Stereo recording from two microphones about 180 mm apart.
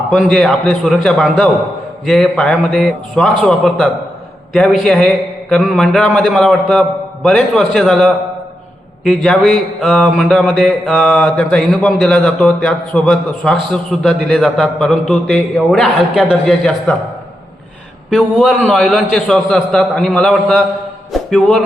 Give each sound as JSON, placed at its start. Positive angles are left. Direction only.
{"t": 0.1, "sound": "a man's voice", "side_deg": 0}
{"t": 18.1, "sound": "a man's voice", "side_deg": 0}